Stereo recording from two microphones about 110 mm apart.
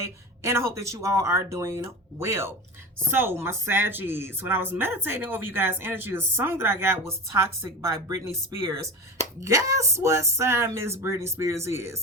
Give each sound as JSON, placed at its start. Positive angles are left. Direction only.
{"t": 0.4, "sound": "a woman's voice", "side_deg": -25}